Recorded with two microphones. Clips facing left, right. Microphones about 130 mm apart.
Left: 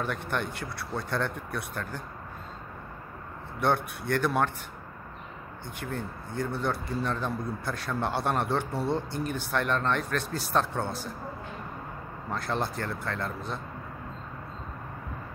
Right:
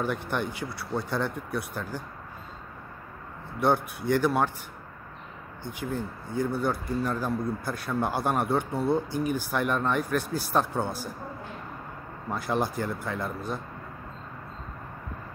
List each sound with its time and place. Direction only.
0.0 s a man's voice: 5° right (ahead or behind)
3.5 s a man's voice: 5° right (ahead or behind)
5.6 s speech: 60° left (ahead or behind)
5.9 s a man's voice: 5° right (ahead or behind)
12.3 s a man's voice: 10° right (ahead or behind)